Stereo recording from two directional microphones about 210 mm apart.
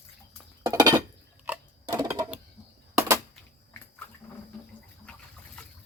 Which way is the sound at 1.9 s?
15° right (ahead or behind).